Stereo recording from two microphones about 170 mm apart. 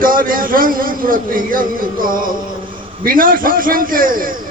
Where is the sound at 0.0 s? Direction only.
55° right (ahead or behind).